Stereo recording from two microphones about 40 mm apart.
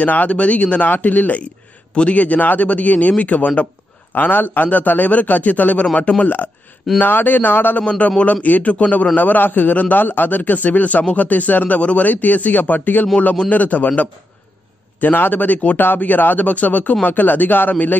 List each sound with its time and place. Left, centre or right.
0.0 s speech: left
0.8 s speech: left
4.2 s speech: left
5.9 s a man's voice: left
6.2 s speech: left
8.2 s speech: left
15.1 s speech: left